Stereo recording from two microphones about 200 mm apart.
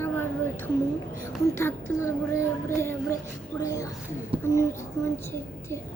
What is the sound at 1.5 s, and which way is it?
A child's voice, 15° left (ahead or behind).